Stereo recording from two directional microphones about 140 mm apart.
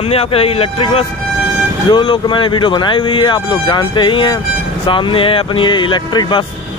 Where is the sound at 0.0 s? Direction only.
45° left (ahead or behind).